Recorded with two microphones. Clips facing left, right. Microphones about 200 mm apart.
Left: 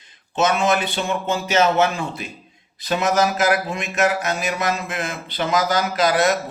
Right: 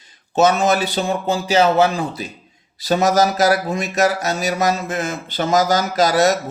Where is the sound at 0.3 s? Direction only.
40° right (ahead or behind).